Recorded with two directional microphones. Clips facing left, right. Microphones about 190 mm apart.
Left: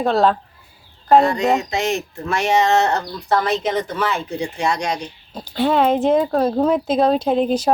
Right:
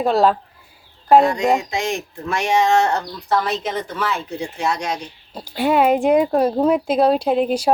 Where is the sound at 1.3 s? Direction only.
10° right (ahead or behind).